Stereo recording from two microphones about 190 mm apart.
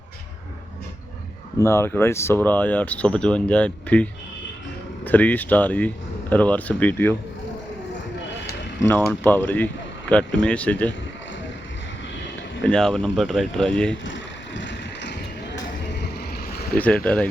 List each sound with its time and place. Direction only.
1.5 s speech: 15° left (ahead or behind)
8.8 s speech: 10° left (ahead or behind)
12.6 s speech: 5° left (ahead or behind)
14.0 s vehicle: 75° left (ahead or behind)
16.7 s speech: 5° left (ahead or behind)